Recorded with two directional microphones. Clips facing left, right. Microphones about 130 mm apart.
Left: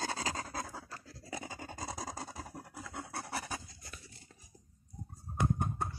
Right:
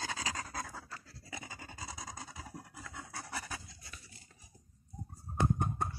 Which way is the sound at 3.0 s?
55° left (ahead or behind).